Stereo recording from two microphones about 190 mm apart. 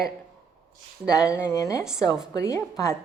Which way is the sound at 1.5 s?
15° left (ahead or behind).